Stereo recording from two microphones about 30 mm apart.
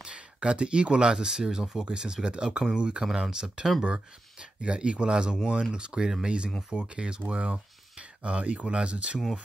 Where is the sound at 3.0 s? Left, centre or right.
Centre.